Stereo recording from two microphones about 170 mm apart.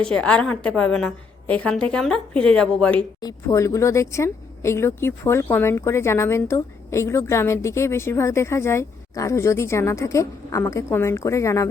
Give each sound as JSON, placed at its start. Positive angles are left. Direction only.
{"t": 0.1, "sound": "a woman's voice", "side_deg": 5}
{"t": 3.2, "sound": "speech", "side_deg": 20}